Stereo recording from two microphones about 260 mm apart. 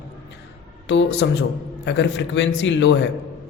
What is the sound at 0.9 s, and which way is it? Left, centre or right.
Speech, left.